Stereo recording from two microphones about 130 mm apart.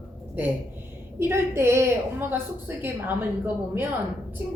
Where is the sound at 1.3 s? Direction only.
20° right (ahead or behind).